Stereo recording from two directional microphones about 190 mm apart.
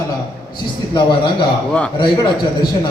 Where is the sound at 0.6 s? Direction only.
25° left (ahead or behind).